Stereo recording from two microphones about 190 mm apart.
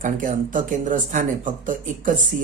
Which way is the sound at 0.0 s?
45° right (ahead or behind).